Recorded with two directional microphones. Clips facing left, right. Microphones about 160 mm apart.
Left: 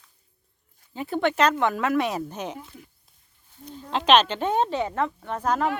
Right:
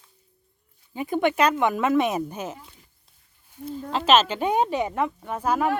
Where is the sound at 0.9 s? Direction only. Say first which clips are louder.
Right 1 dB; 15° right (ahead or behind).